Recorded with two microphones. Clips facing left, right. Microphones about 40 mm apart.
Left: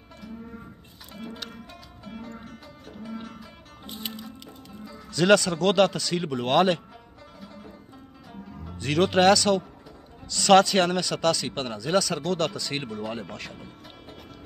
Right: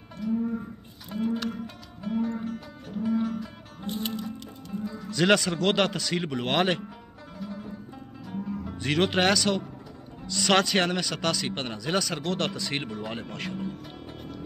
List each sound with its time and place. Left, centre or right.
1.1 s music: centre
5.1 s a man's voice: centre
7.3 s music: centre
8.7 s a man's voice: right